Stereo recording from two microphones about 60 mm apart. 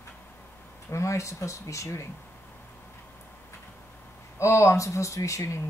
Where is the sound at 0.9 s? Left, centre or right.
Left.